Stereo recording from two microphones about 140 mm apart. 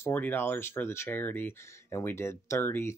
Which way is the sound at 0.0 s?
15° left (ahead or behind).